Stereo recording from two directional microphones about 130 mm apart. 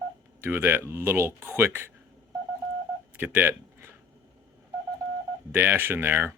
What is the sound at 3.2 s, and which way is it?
Speech, 15° right (ahead or behind).